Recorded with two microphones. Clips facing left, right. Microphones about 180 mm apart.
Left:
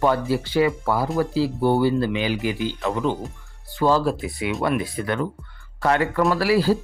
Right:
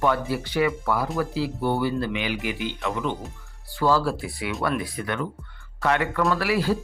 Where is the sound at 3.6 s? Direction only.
20° left (ahead or behind).